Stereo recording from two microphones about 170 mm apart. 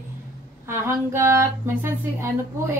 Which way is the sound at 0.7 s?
15° right (ahead or behind).